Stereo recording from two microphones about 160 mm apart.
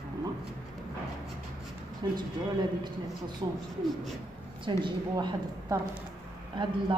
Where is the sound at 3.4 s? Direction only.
25° right (ahead or behind).